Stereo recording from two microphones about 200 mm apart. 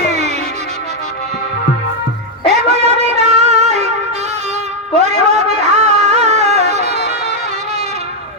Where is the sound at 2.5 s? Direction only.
35° right (ahead or behind).